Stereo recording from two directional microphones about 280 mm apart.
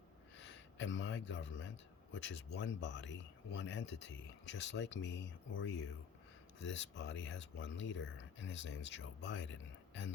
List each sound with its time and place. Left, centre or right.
0.8 s speech: left